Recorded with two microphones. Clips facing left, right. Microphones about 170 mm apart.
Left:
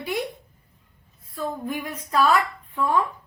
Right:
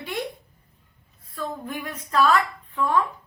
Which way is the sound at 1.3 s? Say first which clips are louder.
Left 3 dB; 10° left (ahead or behind).